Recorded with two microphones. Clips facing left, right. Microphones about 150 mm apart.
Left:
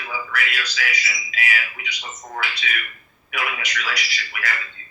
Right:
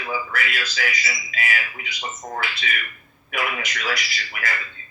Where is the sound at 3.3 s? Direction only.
50° right (ahead or behind).